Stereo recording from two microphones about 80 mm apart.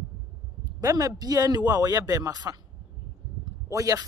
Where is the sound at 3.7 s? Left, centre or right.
Right.